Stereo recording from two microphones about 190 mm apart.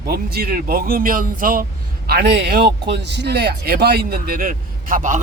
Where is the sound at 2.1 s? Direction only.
60° right (ahead or behind).